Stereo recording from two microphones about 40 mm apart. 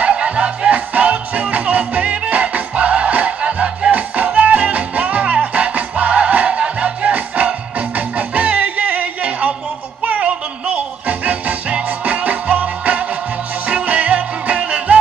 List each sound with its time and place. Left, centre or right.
0.0 s music: right